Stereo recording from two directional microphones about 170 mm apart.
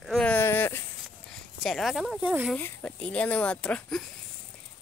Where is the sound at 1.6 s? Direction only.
Centre (ahead or behind).